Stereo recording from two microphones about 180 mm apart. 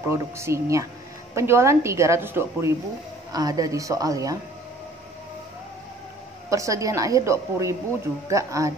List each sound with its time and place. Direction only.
0.1 s a woman's voice: 15° right (ahead or behind)
6.5 s a woman's voice: 15° right (ahead or behind)